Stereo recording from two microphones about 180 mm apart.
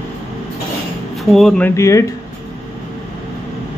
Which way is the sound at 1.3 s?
Centre (ahead or behind).